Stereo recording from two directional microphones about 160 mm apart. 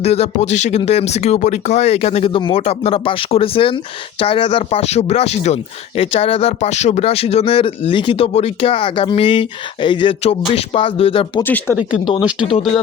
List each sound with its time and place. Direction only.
0.0 s speech: 40° left (ahead or behind)
11.4 s speech: 10° left (ahead or behind)
11.8 s speech: 5° right (ahead or behind)
12.5 s speech: 40° left (ahead or behind)